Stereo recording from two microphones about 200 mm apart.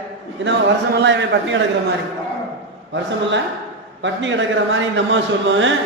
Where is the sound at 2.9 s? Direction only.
65° right (ahead or behind).